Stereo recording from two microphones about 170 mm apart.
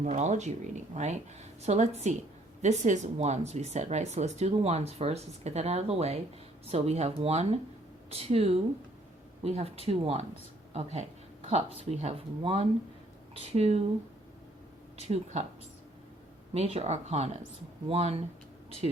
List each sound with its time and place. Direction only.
0.0 s speech: 45° right (ahead or behind)
11.4 s speech: 35° right (ahead or behind)
14.9 s speech: 40° right (ahead or behind)
16.6 s speech: 35° right (ahead or behind)